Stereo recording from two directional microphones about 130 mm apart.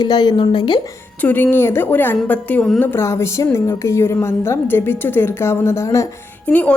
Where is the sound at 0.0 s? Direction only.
30° left (ahead or behind).